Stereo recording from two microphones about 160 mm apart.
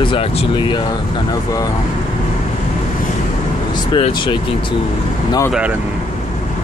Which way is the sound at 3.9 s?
35° left (ahead or behind).